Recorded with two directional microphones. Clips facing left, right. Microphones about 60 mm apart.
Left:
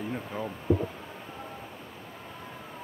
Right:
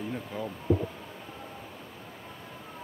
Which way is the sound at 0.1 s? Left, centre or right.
Centre.